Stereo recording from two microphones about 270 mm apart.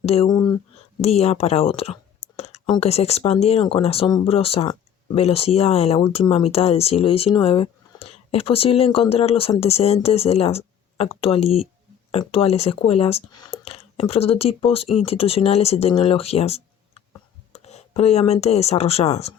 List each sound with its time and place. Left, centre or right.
0.0 s speech: left